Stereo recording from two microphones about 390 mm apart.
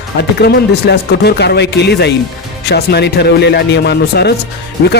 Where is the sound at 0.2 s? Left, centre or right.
Left.